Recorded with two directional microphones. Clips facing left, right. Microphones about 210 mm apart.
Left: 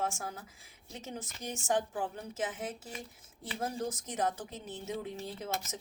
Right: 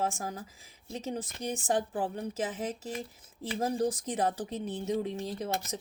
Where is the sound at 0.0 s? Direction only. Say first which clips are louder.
Right 3 dB; 35° right (ahead or behind).